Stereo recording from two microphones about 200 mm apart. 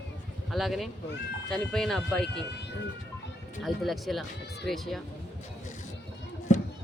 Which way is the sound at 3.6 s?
Centre (ahead or behind).